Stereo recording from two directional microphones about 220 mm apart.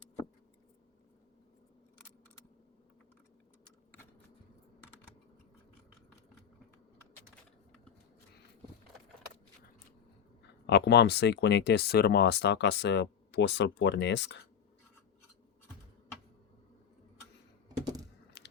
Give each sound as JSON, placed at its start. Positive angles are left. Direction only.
{"t": 10.7, "sound": "speech", "side_deg": 50}
{"t": 18.4, "sound": "biting", "side_deg": 50}